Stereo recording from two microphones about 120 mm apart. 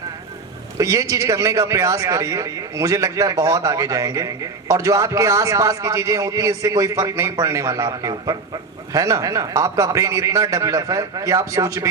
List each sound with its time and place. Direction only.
0.8 s a man's voice: 25° right (ahead or behind)